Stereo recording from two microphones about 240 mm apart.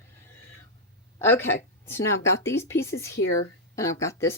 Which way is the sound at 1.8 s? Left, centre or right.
Centre.